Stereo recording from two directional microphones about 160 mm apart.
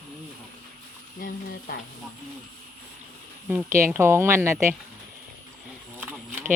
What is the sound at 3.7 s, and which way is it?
A woman's voice, 15° right (ahead or behind).